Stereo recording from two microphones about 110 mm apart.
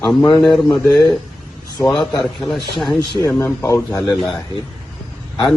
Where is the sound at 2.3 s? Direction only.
Centre (ahead or behind).